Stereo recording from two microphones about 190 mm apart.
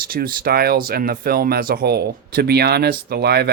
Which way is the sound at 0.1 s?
50° right (ahead or behind).